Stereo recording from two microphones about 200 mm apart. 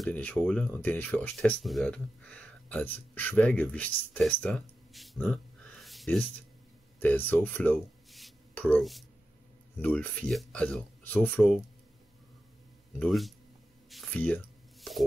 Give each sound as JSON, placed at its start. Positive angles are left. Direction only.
{"t": 0.0, "sound": "speech", "side_deg": 5}
{"t": 13.0, "sound": "speech", "side_deg": 0}
{"t": 13.8, "sound": "a sound", "side_deg": 0}